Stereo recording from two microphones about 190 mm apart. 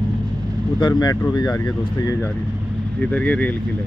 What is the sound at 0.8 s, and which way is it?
Speech, 20° left (ahead or behind).